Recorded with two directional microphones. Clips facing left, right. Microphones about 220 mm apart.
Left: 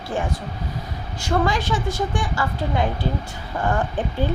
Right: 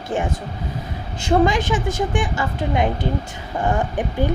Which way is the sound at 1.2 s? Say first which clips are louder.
Right 5 dB; 20° right (ahead or behind).